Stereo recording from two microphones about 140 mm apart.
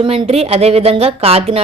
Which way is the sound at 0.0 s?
40° right (ahead or behind).